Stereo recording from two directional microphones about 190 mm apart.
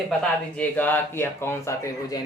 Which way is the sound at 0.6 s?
10° left (ahead or behind).